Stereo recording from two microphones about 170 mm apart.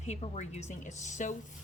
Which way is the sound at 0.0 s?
45° left (ahead or behind).